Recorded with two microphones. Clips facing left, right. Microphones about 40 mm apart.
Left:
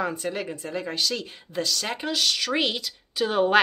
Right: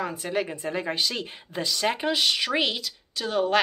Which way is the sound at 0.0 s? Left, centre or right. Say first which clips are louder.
Even; centre.